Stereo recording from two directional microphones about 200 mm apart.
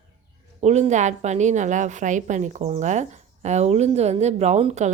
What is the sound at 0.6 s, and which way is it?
A woman's voice, 35° right (ahead or behind).